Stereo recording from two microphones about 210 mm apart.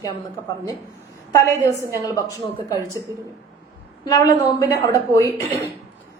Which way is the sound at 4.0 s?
20° left (ahead or behind).